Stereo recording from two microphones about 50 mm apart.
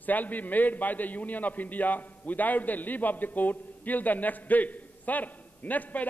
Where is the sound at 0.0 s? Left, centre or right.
Left.